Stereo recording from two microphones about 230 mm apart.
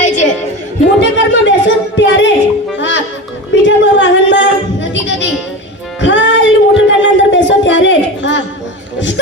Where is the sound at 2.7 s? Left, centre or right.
Left.